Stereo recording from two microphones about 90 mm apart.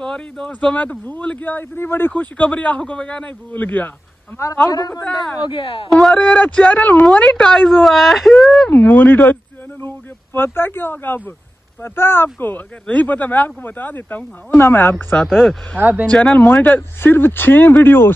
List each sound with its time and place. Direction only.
0.0 s speech: 10° left (ahead or behind)
4.6 s speech: 45° left (ahead or behind)
5.0 s a woman's voice: centre (ahead or behind)
5.5 s speech: 80° left
5.9 s a woman's voice: 5° left (ahead or behind)
8.6 s speech: 20° left (ahead or behind)
15.2 s a woman's voice: 5° right (ahead or behind)
15.8 s speech: 15° right (ahead or behind)
16.1 s speech: 15° left (ahead or behind)